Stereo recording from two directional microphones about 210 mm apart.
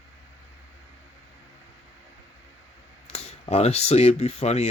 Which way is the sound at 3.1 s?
30° left (ahead or behind).